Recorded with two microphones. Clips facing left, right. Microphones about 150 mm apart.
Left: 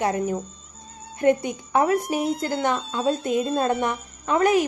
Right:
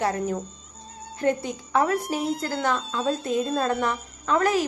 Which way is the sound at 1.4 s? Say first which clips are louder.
Left 2 dB; 20° left (ahead or behind).